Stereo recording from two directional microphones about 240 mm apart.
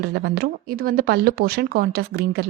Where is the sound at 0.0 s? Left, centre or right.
Right.